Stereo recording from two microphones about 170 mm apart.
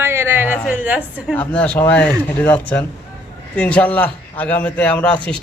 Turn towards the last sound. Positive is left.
turn(degrees=5)  # may be behind; listen again after turning